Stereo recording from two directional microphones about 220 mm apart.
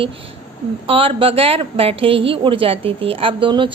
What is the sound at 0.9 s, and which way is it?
A woman's voice, 25° right (ahead or behind).